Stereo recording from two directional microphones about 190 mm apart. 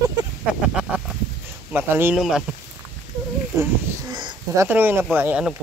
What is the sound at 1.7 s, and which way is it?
Speech, 10° right (ahead or behind).